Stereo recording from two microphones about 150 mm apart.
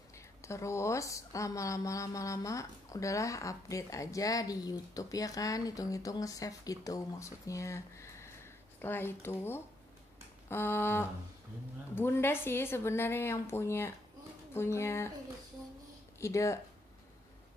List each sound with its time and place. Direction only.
0.1 s a woman's voice: 20° left (ahead or behind)
16.2 s a woman's voice: 20° left (ahead or behind)